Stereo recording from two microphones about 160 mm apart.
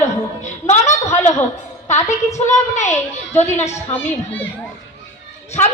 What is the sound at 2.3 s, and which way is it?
A woman's voice, 45° left (ahead or behind).